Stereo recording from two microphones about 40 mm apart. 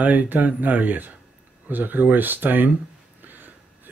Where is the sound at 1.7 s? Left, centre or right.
Right.